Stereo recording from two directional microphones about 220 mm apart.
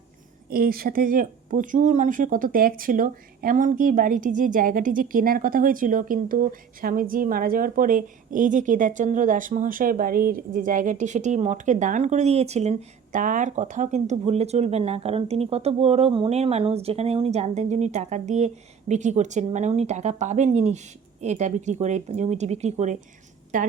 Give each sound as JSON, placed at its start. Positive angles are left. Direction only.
{"t": 0.5, "sound": "speech", "side_deg": -40}